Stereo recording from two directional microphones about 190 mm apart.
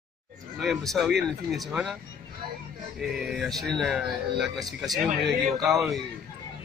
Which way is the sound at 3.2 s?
Centre (ahead or behind).